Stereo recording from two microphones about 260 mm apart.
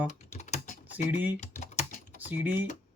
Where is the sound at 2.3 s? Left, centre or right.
Centre.